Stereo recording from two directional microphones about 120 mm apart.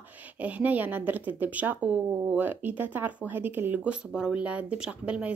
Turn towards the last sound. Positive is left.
turn(degrees=-10)  # may be behind; listen again after turning